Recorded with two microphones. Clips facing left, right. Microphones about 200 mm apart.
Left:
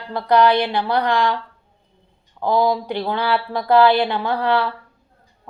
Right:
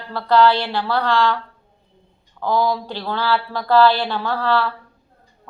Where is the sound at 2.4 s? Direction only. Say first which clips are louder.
Left 2 dB; 20° left (ahead or behind).